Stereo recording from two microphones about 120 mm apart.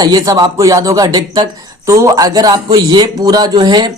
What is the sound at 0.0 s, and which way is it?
A man's voice, 35° right (ahead or behind).